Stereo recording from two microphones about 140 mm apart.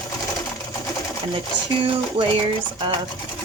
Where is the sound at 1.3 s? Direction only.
35° right (ahead or behind).